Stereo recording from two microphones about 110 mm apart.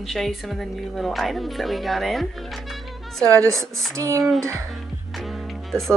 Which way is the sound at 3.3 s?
30° right (ahead or behind).